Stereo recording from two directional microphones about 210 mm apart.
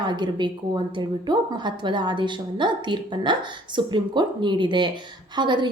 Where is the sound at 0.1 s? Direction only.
20° right (ahead or behind).